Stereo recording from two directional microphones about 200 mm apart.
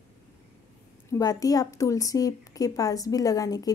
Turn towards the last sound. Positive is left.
turn(degrees=20)  # may be behind; listen again after turning